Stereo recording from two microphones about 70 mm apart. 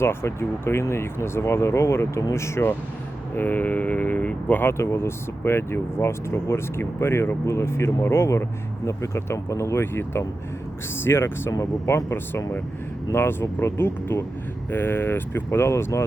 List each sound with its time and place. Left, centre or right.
0.0 s speech: left
3.3 s speech: left
4.8 s speech: left
9.7 s speech: left
11.5 s speech: left